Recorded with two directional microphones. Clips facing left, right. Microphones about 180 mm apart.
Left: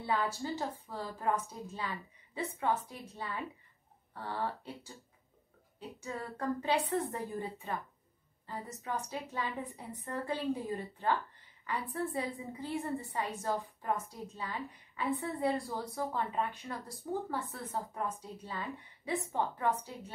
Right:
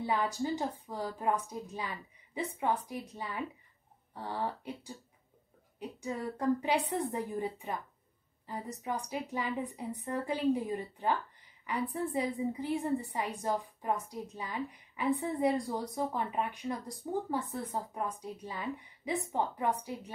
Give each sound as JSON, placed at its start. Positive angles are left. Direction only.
{"t": 0.0, "sound": "a woman's voice", "side_deg": -15}